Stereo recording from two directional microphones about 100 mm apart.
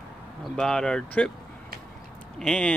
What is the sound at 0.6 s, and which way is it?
Speech, 5° left (ahead or behind).